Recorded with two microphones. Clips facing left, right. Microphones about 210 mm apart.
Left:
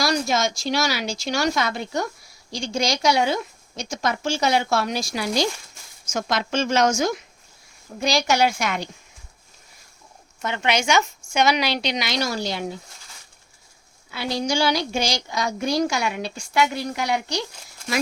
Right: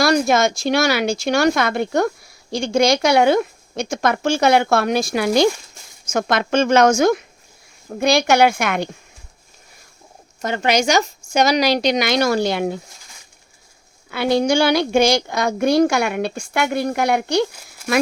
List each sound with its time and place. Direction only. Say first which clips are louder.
0.0 s speech: right 6 dB; 55° right (ahead or behind)
10.4 s a woman's voice: right 5 dB; 40° right (ahead or behind); by 12.8 s 60° right (ahead or behind)
14.1 s speech: right 8 dB; 60° right (ahead or behind)